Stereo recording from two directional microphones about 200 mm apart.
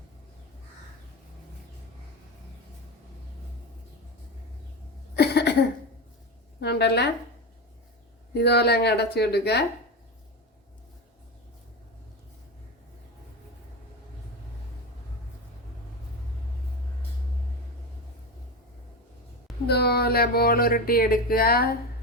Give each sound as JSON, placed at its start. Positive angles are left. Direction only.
{"t": 5.1, "sound": "cough", "side_deg": 55}
{"t": 6.6, "sound": "a woman's voice", "side_deg": 55}
{"t": 8.3, "sound": "a woman's voice", "side_deg": 55}
{"t": 19.6, "sound": "speech", "side_deg": 55}